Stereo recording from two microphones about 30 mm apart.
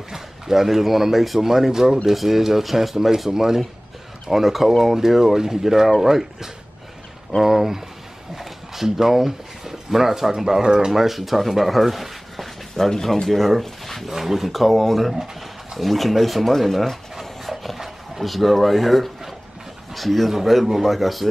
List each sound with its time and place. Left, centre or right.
0.1 s speech: centre
4.3 s speech: centre
10.6 s speech: right
10.9 s speech: centre
12.8 s speech: centre
13.3 s speech: centre
14.0 s speech: centre
17.7 s dog: centre
18.2 s speech: centre